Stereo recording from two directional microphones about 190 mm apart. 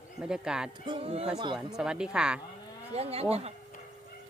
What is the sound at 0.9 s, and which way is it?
Speech, 30° right (ahead or behind).